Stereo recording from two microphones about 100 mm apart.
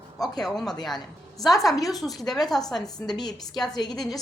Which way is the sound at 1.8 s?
Centre (ahead or behind).